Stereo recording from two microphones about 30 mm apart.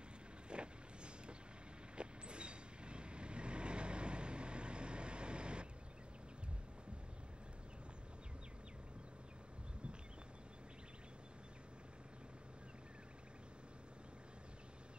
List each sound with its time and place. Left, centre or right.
0.5 s vehicle: right